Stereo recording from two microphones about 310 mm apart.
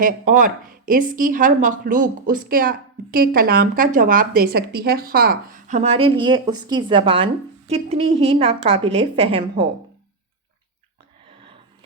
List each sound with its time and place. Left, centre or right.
0.0 s a woman's voice: right